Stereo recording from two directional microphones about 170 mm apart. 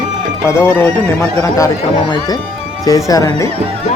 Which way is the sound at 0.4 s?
15° left (ahead or behind).